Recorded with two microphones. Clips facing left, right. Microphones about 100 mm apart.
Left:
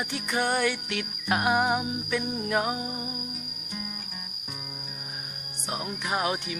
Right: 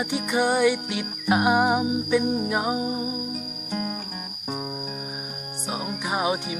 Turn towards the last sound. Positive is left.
turn(degrees=-15)  # may be behind; listen again after turning